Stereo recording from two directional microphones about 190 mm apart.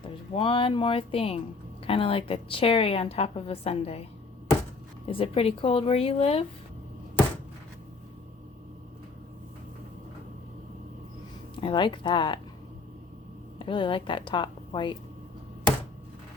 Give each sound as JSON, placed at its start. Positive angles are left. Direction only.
{"t": 0.0, "sound": "a woman's voice", "side_deg": 25}
{"t": 5.1, "sound": "a woman's voice", "side_deg": 30}
{"t": 11.5, "sound": "speech", "side_deg": 25}
{"t": 13.7, "sound": "speech", "side_deg": 25}